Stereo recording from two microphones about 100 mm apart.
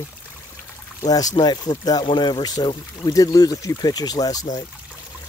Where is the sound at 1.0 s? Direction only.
40° left (ahead or behind).